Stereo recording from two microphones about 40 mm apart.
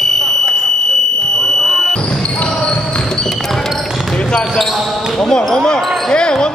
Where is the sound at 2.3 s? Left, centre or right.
Left.